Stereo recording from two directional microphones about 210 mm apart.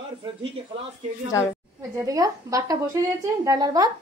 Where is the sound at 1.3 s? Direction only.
15° left (ahead or behind).